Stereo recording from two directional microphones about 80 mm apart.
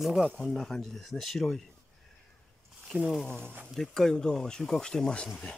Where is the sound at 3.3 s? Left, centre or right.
Centre.